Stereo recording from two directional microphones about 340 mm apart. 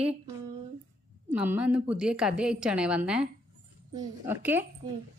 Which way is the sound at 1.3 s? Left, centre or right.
Centre.